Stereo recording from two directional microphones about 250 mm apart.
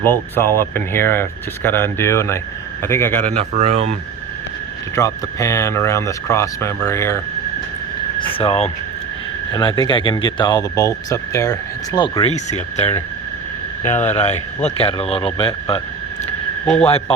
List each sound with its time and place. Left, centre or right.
0.0 s speech: centre
3.3 s speech: right
4.9 s speech: centre
8.2 s speech: left